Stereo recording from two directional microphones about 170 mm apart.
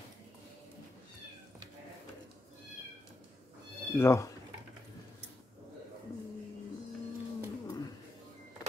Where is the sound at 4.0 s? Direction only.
15° left (ahead or behind).